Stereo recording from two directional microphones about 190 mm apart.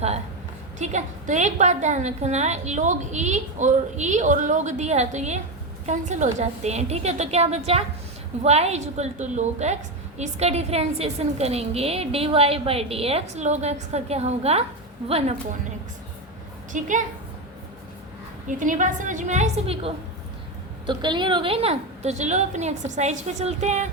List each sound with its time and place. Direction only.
0.8 s a woman's voice: 40° right (ahead or behind)
16.7 s a woman's voice: 40° right (ahead or behind)
18.4 s a woman's voice: 40° right (ahead or behind)